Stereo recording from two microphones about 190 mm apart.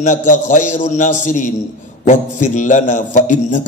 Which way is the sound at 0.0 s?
40° left (ahead or behind).